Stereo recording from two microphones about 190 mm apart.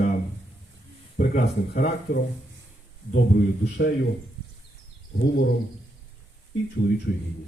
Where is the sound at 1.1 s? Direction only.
50° left (ahead or behind).